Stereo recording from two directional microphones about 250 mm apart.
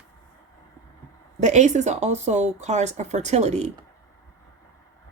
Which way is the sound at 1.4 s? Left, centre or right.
Right.